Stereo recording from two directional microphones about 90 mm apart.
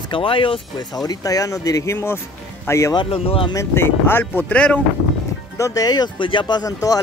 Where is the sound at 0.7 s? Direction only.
45° left (ahead or behind); by 2.9 s 30° left (ahead or behind).